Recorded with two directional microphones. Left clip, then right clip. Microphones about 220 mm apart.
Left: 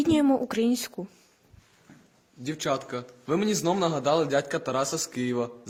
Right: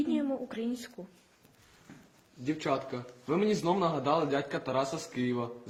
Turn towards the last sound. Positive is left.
turn(degrees=50)  # may be behind; listen again after turning